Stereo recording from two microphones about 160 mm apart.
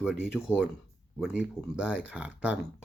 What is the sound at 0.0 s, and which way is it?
Speech, 5° right (ahead or behind).